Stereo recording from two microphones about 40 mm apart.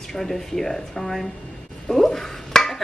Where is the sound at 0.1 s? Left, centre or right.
Centre.